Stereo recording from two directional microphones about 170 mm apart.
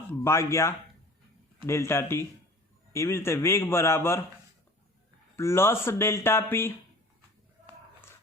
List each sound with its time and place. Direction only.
0.1 s speech: 15° left (ahead or behind)
5.4 s speech: 15° left (ahead or behind)